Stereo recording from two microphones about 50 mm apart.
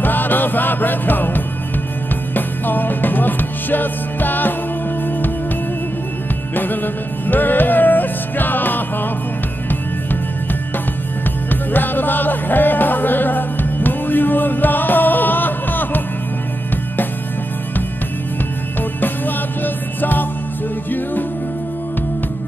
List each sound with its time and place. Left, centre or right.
0.0 s music: left
6.5 s music: left
11.7 s music: left
18.8 s music: left